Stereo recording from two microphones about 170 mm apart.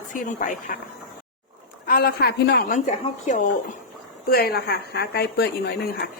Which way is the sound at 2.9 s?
45° left (ahead or behind).